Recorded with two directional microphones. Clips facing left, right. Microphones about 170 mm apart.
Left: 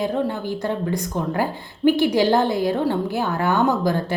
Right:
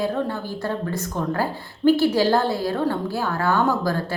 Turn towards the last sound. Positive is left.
turn(degrees=20)  # may be behind; listen again after turning